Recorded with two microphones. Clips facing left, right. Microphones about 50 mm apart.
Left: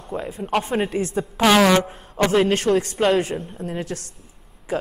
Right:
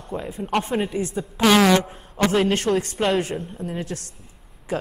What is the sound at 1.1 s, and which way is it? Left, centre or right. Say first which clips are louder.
Speech: left 1 dB; centre.